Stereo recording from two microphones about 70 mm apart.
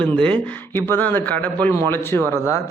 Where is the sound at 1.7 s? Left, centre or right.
Left.